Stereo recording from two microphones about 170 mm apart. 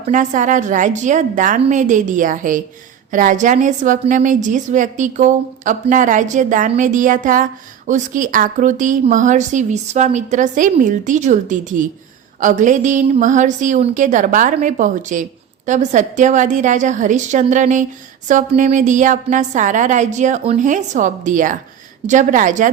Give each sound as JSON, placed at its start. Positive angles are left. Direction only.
{"t": 0.1, "sound": "a woman's voice", "side_deg": -45}